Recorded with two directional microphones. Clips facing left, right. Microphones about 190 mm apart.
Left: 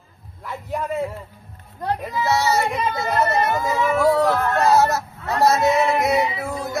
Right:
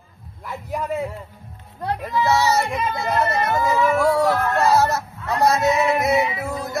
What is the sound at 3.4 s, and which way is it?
Speech, 20° left (ahead or behind).